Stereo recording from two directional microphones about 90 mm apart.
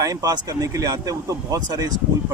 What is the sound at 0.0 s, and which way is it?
Speech, 40° right (ahead or behind).